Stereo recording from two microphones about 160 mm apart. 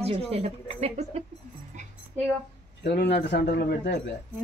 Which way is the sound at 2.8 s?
90° left.